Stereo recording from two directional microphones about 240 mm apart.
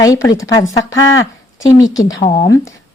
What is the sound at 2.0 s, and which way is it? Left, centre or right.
Speech, centre.